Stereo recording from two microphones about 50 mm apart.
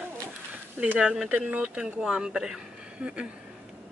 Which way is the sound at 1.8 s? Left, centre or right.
Centre.